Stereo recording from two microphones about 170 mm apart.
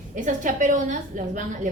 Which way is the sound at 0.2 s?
50° right (ahead or behind).